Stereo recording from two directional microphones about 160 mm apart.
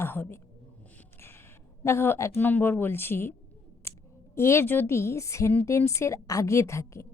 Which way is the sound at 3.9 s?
15° left (ahead or behind).